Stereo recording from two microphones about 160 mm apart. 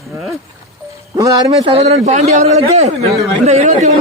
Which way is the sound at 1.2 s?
25° right (ahead or behind).